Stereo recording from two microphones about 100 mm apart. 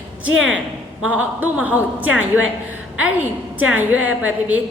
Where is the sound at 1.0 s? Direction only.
15° right (ahead or behind).